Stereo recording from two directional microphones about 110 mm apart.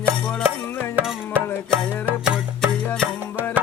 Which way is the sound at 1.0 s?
10° right (ahead or behind).